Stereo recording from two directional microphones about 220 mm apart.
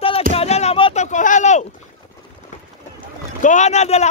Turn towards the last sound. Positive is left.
turn(degrees=30)  # may be behind; listen again after turning